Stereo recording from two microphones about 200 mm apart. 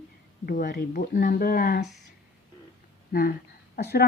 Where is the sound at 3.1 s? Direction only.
50° left (ahead or behind).